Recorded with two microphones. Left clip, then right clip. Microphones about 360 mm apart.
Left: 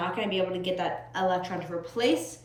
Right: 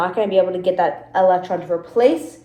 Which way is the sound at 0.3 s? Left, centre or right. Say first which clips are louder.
Right 12 dB; right.